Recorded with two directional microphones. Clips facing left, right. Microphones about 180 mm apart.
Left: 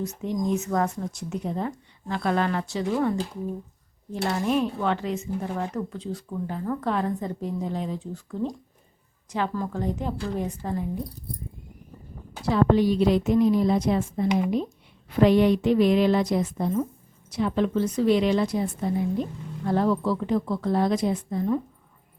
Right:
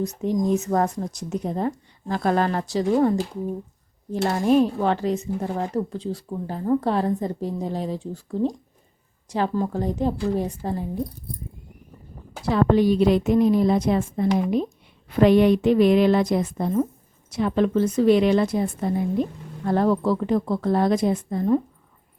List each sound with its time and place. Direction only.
0.0 s speech: 40° right (ahead or behind)
4.3 s speech: 40° right (ahead or behind)
12.5 s a woman's voice: 55° right (ahead or behind)